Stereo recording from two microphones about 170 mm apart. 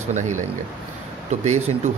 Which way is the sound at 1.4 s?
40° right (ahead or behind).